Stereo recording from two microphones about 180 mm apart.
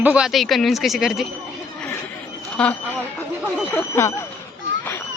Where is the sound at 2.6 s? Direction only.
5° left (ahead or behind).